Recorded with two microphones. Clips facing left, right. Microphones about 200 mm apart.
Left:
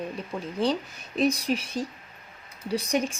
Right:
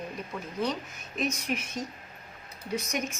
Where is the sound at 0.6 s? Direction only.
30° left (ahead or behind).